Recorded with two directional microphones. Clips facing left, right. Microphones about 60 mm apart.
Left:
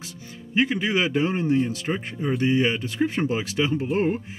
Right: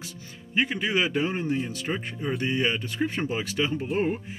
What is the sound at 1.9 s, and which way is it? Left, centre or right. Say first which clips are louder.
Speech: left 3 dB; centre.